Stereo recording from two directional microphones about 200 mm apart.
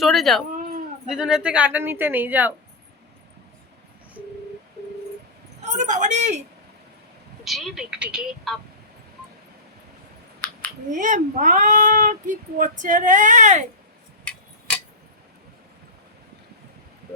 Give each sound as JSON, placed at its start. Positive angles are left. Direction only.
{"t": 0.0, "sound": "a woman's voice", "side_deg": 0}
{"t": 5.7, "sound": "speech", "side_deg": -35}
{"t": 7.4, "sound": "a woman's voice", "side_deg": 0}
{"t": 10.9, "sound": "speech", "side_deg": -40}